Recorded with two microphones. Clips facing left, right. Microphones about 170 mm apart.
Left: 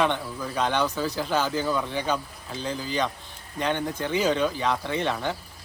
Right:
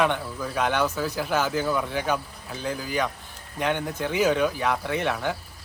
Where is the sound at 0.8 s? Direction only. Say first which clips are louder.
Even; 15° left (ahead or behind).